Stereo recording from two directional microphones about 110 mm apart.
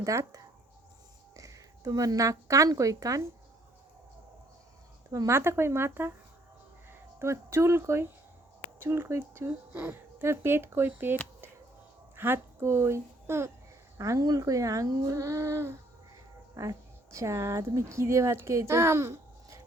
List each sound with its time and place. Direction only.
0.0 s speech: 30° right (ahead or behind)
5.1 s speech: 25° right (ahead or behind)
7.2 s speech: 25° right (ahead or behind)